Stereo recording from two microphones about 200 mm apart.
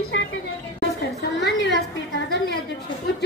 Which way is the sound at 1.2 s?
60° left (ahead or behind).